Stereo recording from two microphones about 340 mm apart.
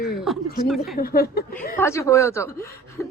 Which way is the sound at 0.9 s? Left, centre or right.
Left.